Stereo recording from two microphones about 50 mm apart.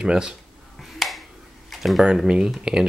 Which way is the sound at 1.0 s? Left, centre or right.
Centre.